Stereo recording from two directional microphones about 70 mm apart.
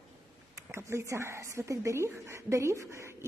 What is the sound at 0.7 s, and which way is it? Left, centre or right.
A woman's voice, right.